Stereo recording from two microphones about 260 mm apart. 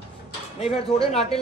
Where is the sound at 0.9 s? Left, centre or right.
Left.